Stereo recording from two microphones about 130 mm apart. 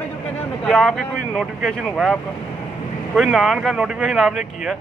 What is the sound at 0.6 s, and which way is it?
Speech, 5° left (ahead or behind).